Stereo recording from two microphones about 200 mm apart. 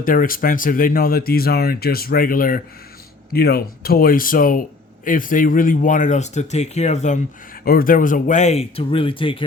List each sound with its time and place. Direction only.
0.0 s speech: 45° left (ahead or behind)
7.6 s speech: 45° left (ahead or behind); by 9.4 s 25° left (ahead or behind)